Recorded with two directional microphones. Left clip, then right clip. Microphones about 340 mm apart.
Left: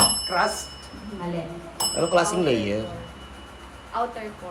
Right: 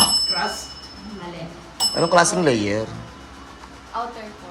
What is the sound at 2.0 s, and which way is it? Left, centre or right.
Speech, right.